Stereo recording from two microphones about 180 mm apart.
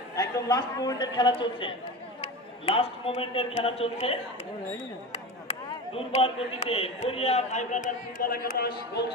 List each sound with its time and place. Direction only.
0.1 s a man's voice: 20° left (ahead or behind)
5.5 s speech: 35° left (ahead or behind); by 9.0 s 55° left (ahead or behind)